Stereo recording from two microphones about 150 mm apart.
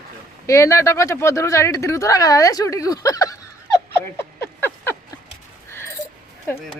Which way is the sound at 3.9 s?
15° left (ahead or behind).